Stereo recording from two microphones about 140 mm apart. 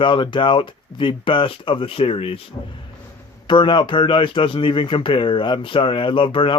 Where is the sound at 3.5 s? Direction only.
35° left (ahead or behind).